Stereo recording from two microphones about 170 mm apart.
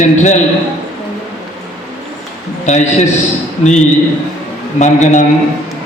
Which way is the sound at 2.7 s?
45° left (ahead or behind).